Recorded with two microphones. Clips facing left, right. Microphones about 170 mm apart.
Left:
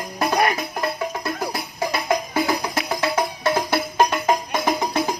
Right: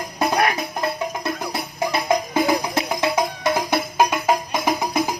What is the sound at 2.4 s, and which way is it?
Music, 20° right (ahead or behind).